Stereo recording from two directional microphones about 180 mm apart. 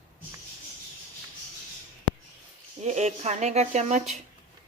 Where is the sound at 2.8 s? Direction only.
40° right (ahead or behind).